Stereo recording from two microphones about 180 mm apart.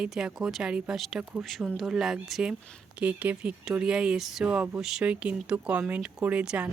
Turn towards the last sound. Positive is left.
turn(degrees=-5)  # may be behind; listen again after turning